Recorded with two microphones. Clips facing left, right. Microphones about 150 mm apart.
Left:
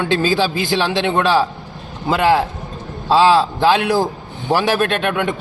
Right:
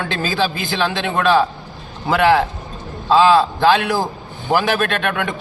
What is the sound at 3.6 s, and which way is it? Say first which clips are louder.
A man's voice: left 1 dB; 20° left (ahead or behind).